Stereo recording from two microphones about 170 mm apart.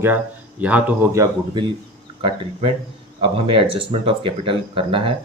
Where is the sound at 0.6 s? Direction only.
10° right (ahead or behind).